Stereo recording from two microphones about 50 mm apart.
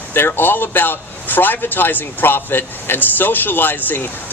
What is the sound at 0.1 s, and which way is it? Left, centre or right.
A man's voice, left.